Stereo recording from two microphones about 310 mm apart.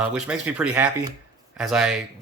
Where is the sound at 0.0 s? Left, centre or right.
Centre.